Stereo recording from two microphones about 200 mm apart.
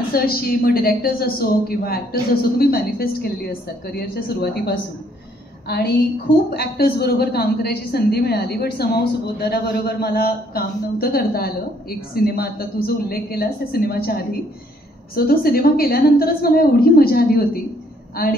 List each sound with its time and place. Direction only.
0.1 s a woman's voice: 50° left (ahead or behind)